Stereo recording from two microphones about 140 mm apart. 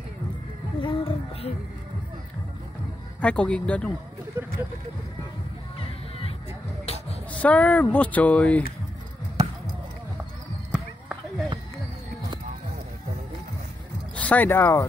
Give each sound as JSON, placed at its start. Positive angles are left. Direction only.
{"t": 0.7, "sound": "music", "side_deg": 40}
{"t": 3.2, "sound": "speech", "side_deg": 10}
{"t": 4.4, "sound": "vehicle", "side_deg": -15}
{"t": 5.8, "sound": "music", "side_deg": 45}
{"t": 7.4, "sound": "speech", "side_deg": 10}
{"t": 10.7, "sound": "basketball bounce", "side_deg": -5}
{"t": 14.1, "sound": "speech", "side_deg": 10}